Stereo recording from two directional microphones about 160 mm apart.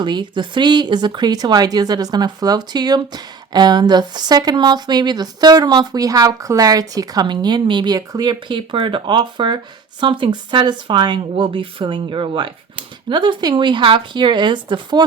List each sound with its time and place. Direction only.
0.0 s speech: 30° right (ahead or behind)